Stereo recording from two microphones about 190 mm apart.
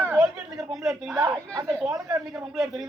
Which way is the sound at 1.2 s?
15° right (ahead or behind).